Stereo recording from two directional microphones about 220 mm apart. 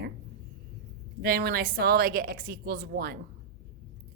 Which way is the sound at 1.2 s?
45° right (ahead or behind).